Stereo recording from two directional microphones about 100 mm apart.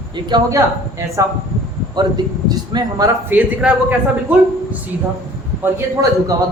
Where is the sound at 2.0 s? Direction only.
45° right (ahead or behind).